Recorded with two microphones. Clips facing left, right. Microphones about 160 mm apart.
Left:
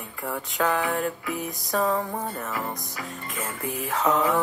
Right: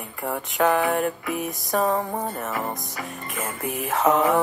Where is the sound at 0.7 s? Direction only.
50° right (ahead or behind).